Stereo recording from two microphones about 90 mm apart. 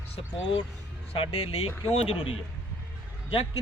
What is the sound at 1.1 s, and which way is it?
Speech, 85° left.